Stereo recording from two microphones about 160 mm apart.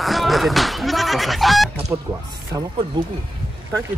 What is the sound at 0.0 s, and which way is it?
Fowl, centre (ahead or behind).